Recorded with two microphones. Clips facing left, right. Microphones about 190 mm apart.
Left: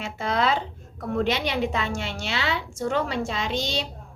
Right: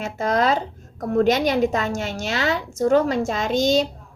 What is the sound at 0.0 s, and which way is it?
A child's voice, 40° right (ahead or behind).